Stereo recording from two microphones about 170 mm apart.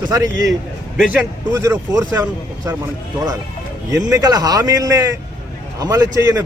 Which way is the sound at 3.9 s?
20° right (ahead or behind).